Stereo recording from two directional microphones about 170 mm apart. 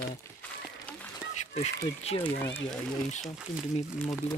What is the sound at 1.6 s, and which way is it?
Speech, 40° left (ahead or behind).